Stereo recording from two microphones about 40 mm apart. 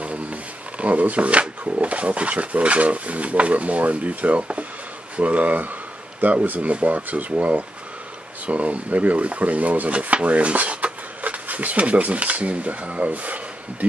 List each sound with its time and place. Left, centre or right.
0.0 s speech: right